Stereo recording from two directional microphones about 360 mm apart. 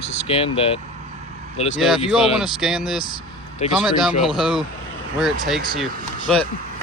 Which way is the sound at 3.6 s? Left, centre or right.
Centre.